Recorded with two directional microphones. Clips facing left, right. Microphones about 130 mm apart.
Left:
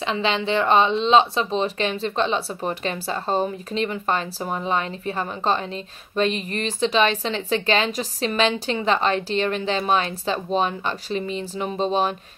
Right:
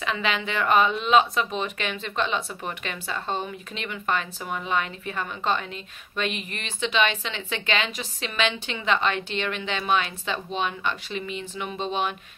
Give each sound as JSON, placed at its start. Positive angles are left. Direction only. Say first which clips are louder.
{"t": 0.0, "sound": "speech", "louder": "left 4 dB", "side_deg": 30}